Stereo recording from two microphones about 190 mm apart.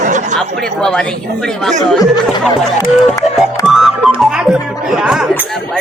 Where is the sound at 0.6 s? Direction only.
5° left (ahead or behind).